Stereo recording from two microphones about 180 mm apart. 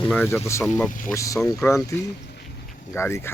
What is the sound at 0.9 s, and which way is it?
Speech, 45° left (ahead or behind).